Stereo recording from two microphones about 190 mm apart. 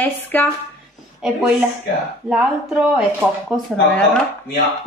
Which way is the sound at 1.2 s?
5° right (ahead or behind).